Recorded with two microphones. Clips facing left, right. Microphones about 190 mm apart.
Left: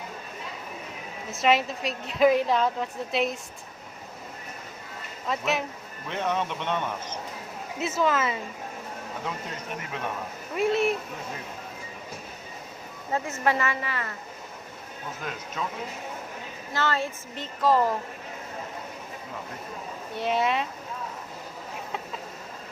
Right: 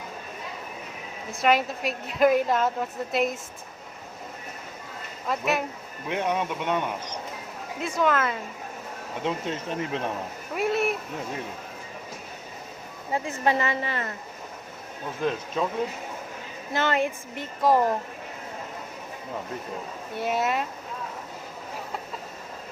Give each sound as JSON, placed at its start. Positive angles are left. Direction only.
{"t": 1.3, "sound": "a woman's voice", "side_deg": 0}
{"t": 5.3, "sound": "a woman's voice", "side_deg": 0}
{"t": 6.1, "sound": "a woman's voice", "side_deg": -10}
{"t": 7.8, "sound": "a woman's voice", "side_deg": 5}
{"t": 9.2, "sound": "speech", "side_deg": -30}
{"t": 10.5, "sound": "a woman's voice", "side_deg": 0}
{"t": 13.1, "sound": "a woman's voice", "side_deg": -15}
{"t": 16.7, "sound": "a woman's voice", "side_deg": -20}
{"t": 20.1, "sound": "a woman's voice", "side_deg": -5}